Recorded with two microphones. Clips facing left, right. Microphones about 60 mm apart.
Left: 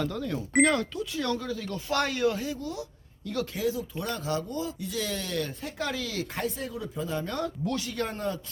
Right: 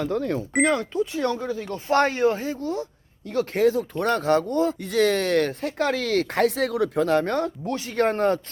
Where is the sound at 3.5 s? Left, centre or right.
Right.